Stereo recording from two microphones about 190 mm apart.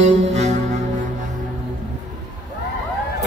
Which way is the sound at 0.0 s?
35° right (ahead or behind).